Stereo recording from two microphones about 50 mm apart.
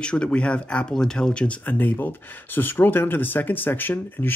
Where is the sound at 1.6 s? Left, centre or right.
Left.